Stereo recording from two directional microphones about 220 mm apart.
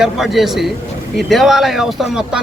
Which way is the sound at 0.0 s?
Centre (ahead or behind).